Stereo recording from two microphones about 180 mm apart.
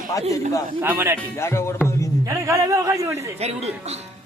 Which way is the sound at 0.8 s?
10° right (ahead or behind).